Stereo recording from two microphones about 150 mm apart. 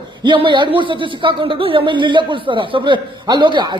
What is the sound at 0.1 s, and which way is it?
Speech, 30° right (ahead or behind).